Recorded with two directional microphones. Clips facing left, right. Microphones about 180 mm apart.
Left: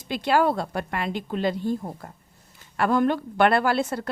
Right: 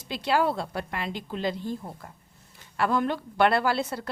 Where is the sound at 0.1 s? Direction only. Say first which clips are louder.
Left 3 dB; 55° left (ahead or behind).